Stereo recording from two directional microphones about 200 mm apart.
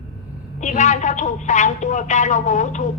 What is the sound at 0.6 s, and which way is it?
Speech, 40° left (ahead or behind).